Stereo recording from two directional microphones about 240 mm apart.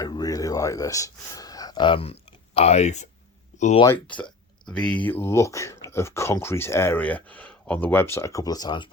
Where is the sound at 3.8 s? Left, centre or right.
Centre.